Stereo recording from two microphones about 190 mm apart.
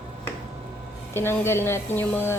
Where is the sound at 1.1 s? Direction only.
10° left (ahead or behind).